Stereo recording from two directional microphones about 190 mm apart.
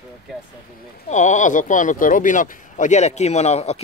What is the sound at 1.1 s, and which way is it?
Speech, 40° left (ahead or behind).